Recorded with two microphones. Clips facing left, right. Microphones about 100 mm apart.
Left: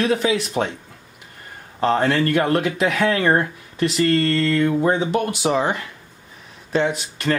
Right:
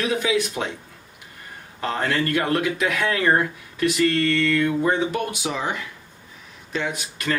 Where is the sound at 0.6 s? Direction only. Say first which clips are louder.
Left 5 dB; 40° left (ahead or behind).